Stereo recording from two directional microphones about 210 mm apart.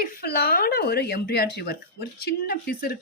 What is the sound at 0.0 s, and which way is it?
Speech, 45° left (ahead or behind).